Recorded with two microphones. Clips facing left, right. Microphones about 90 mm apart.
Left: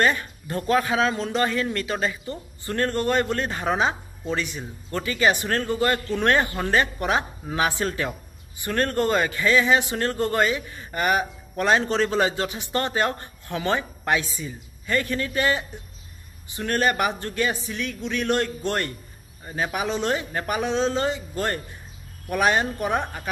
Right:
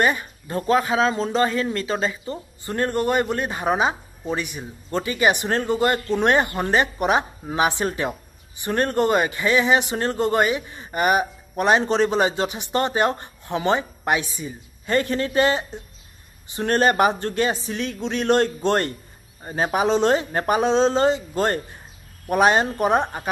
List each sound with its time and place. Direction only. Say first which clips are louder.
0.0 s speech: right 1 dB; 15° right (ahead or behind)
0.6 s speech: right 2 dB; 25° right (ahead or behind)
14.9 s speech: right 4 dB; 30° right (ahead or behind)